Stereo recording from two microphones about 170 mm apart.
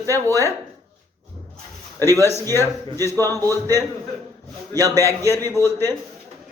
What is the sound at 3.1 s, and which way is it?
Speech, 20° right (ahead or behind).